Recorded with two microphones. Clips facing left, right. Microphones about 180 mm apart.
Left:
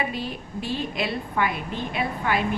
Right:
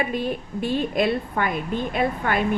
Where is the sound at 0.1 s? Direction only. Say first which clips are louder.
Right 5 dB; 50° right (ahead or behind).